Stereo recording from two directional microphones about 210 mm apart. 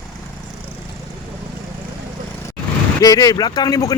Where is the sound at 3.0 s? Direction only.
15° left (ahead or behind).